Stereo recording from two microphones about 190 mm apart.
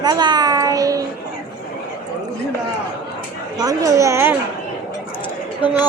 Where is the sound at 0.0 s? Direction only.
20° right (ahead or behind).